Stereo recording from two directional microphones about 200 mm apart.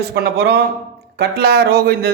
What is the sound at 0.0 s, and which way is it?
A man's voice, 55° right (ahead or behind).